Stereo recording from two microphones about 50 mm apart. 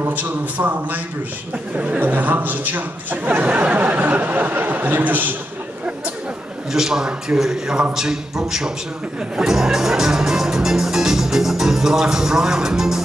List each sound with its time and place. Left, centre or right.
0.1 s a man's voice: right
6.7 s a man's voice: centre
9.4 s music: centre